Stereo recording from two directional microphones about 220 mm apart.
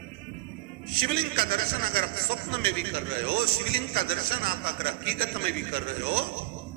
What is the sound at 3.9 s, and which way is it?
A man's voice, 45° right (ahead or behind).